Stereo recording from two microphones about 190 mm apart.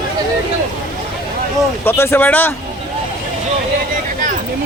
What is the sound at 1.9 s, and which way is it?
Speech, 10° left (ahead or behind).